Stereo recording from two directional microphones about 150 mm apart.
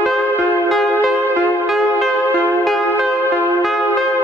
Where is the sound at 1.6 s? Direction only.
Centre (ahead or behind).